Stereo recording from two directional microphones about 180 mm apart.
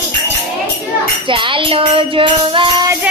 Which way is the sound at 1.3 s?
30° right (ahead or behind).